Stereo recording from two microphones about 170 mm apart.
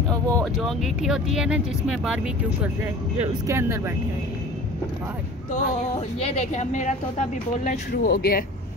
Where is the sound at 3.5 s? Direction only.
15° right (ahead or behind).